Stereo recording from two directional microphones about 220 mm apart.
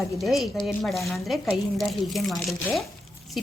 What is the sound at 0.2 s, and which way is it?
Speech, centre (ahead or behind).